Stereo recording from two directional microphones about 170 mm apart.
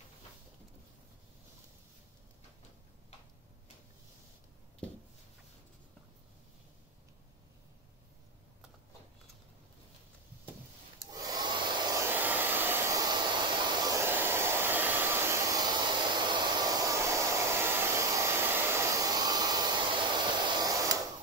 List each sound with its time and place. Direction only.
11.1 s hair dryer: 20° right (ahead or behind)